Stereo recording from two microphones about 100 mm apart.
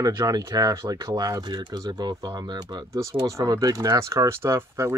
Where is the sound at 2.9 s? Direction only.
30° right (ahead or behind).